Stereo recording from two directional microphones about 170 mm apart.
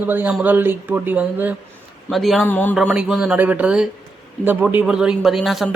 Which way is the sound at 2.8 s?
5° right (ahead or behind).